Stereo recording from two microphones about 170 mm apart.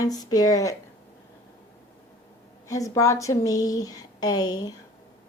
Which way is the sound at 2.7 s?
20° left (ahead or behind).